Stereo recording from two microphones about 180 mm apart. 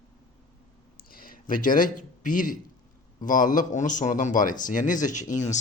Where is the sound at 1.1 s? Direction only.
50° left (ahead or behind).